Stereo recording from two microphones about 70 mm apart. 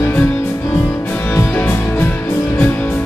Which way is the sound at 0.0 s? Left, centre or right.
Left.